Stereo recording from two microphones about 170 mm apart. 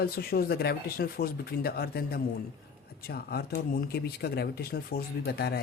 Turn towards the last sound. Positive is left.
turn(degrees=70)  # may be behind; listen again after turning